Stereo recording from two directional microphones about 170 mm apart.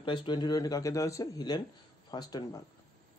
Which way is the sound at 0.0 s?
30° left (ahead or behind).